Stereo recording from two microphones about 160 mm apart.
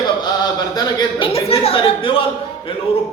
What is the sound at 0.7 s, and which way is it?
A man's voice, 25° left (ahead or behind).